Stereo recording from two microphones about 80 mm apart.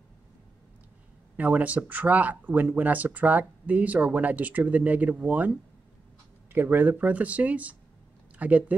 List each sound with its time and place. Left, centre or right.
1.3 s speech: centre